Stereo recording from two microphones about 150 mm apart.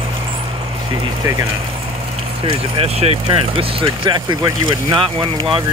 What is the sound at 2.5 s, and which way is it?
Speech, 40° right (ahead or behind).